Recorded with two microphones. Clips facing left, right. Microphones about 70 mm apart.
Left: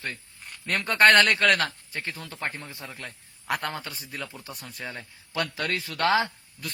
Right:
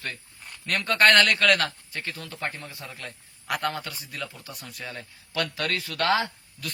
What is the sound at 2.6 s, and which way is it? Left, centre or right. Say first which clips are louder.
Speech: even; left.